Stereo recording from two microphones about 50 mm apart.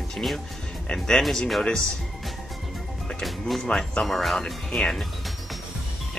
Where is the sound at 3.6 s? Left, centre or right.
Centre.